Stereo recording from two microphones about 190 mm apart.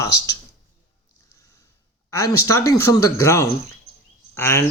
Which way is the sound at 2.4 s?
15° left (ahead or behind).